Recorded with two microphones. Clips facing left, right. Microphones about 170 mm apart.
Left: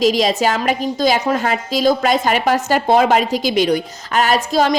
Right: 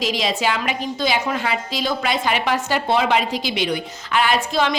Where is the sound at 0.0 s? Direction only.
40° left (ahead or behind).